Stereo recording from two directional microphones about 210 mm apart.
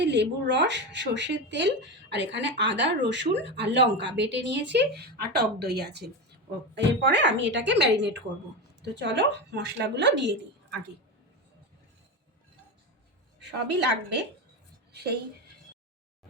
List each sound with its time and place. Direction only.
0.0 s speech: 55° right (ahead or behind)
13.4 s speech: 55° right (ahead or behind)